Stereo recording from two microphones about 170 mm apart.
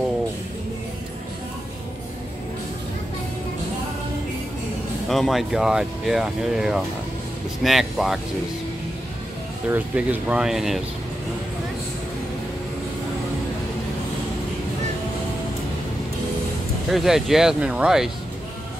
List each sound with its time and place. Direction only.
5.0 s speech: centre (ahead or behind)
9.7 s speech: 10° right (ahead or behind)
16.9 s speech: centre (ahead or behind)